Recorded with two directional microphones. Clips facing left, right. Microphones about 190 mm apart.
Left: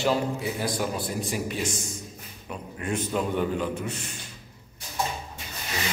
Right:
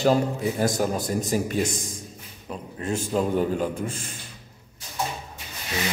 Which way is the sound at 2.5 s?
25° right (ahead or behind).